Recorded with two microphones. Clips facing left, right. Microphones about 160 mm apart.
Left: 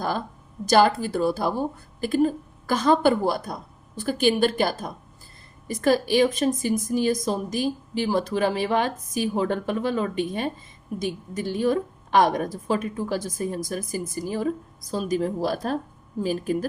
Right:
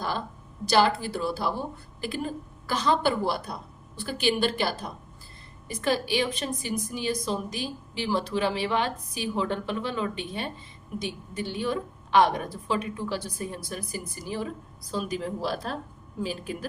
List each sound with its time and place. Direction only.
0.6 s a woman's voice: 45° left (ahead or behind)